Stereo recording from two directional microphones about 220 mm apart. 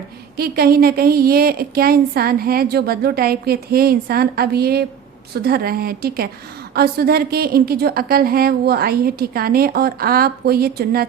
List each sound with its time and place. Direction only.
0.3 s speech: 45° right (ahead or behind)